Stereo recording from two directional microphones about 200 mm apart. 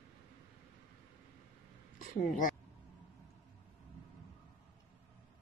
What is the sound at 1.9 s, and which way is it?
Speech, 40° left (ahead or behind).